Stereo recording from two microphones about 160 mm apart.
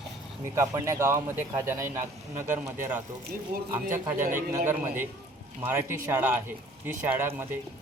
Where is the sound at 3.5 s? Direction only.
65° right (ahead or behind).